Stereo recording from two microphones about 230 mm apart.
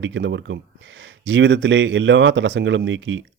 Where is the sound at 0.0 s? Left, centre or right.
Right.